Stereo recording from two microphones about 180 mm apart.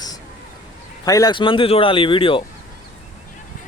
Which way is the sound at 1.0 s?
20° left (ahead or behind).